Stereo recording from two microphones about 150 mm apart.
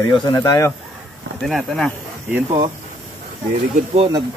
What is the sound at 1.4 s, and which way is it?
Speech, centre (ahead or behind).